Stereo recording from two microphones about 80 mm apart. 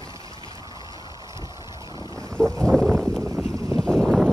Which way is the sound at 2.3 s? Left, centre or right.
Centre.